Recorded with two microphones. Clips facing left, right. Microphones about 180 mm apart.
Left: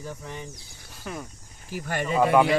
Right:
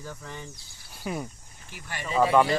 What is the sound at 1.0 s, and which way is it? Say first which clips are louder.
Speech: right 3 dB; 5° right (ahead or behind).